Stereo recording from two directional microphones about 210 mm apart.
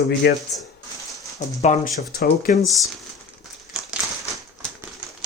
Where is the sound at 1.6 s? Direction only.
40° left (ahead or behind).